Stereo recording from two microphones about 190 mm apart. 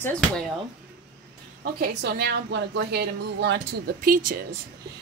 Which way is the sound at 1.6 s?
55° right (ahead or behind).